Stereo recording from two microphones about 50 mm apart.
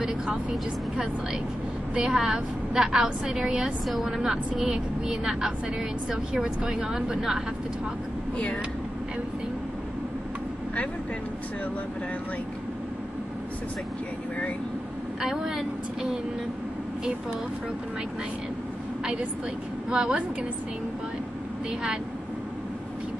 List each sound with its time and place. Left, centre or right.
0.0 s a woman's voice: centre
3.8 s a woman's voice: centre
15.2 s a woman's voice: centre
19.9 s a woman's voice: centre